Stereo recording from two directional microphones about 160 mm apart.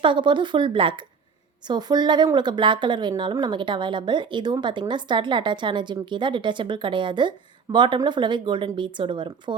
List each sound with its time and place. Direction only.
0.0 s speech: 30° right (ahead or behind)